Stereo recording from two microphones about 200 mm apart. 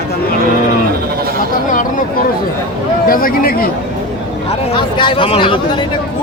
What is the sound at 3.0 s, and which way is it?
Speech, 45° left (ahead or behind).